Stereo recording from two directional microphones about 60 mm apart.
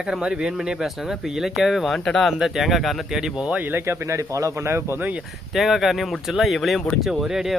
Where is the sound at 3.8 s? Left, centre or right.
Right.